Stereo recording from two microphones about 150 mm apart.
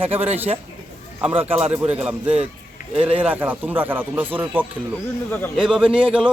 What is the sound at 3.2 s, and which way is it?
Speech, 10° right (ahead or behind).